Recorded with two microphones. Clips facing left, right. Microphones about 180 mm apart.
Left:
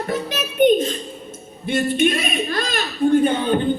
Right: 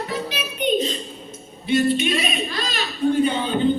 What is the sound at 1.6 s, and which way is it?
A man's voice, 50° left (ahead or behind).